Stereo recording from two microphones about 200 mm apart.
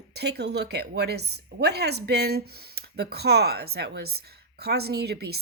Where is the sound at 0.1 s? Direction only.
55° right (ahead or behind).